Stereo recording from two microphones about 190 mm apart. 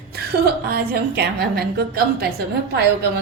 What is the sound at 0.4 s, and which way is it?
A woman's voice, 55° right (ahead or behind).